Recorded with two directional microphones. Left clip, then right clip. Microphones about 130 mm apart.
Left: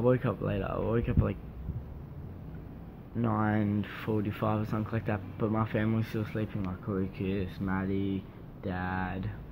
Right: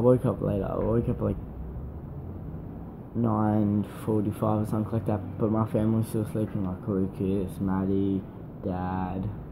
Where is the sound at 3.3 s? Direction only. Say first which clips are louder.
Right 4 dB; 30° left (ahead or behind); by 5.9 s 45° left (ahead or behind).